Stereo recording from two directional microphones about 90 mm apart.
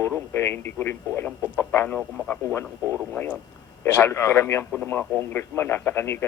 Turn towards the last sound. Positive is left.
turn(degrees=30)  # may be behind; listen again after turning